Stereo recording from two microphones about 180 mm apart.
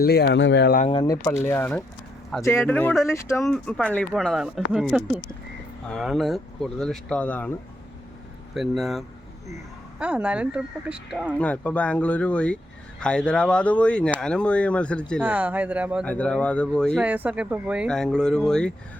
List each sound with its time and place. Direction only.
0.0 s speech: 65° left (ahead or behind)
0.9 s speech: 25° left (ahead or behind)
3.4 s speech: 5° left (ahead or behind)
8.5 s speech: centre (ahead or behind)
11.3 s speech: 10° left (ahead or behind)
15.2 s speech: 10° right (ahead or behind)
16.0 s speech: 5° left (ahead or behind)
17.0 s speech: 10° right (ahead or behind)